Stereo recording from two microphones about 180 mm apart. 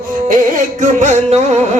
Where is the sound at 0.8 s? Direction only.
40° right (ahead or behind).